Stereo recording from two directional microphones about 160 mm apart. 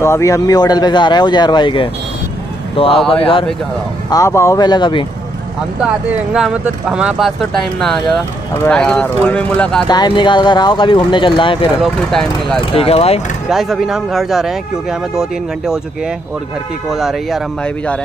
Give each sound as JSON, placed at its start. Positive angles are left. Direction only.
{"t": 0.0, "sound": "speech", "side_deg": 20}
{"t": 4.1, "sound": "speech", "side_deg": 20}
{"t": 5.8, "sound": "speech", "side_deg": -5}
{"t": 9.8, "sound": "speech", "side_deg": 25}
{"t": 11.8, "sound": "speech", "side_deg": 0}
{"t": 12.7, "sound": "speech", "side_deg": 35}
{"t": 13.5, "sound": "speech", "side_deg": 0}
{"t": 16.9, "sound": "speech", "side_deg": 0}